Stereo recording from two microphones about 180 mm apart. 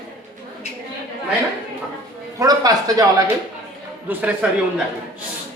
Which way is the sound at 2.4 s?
20° right (ahead or behind).